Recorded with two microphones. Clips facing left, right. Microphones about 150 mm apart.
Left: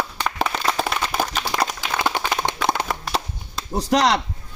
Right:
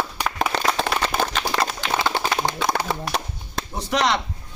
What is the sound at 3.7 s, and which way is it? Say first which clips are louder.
Speech: left 4 dB; 35° left (ahead or behind).